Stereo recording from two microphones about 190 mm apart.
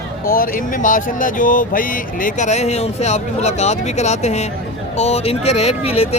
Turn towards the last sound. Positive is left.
turn(degrees=30)  # may be behind; listen again after turning